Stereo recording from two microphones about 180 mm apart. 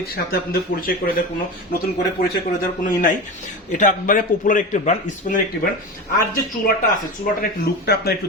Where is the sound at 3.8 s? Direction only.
45° left (ahead or behind).